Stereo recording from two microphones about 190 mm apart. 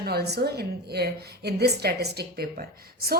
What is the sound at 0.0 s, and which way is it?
A woman's voice, 55° right (ahead or behind).